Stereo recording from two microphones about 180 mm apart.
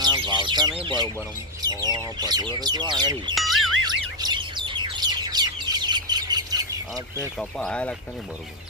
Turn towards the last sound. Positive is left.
turn(degrees=5)  # may be behind; listen again after turning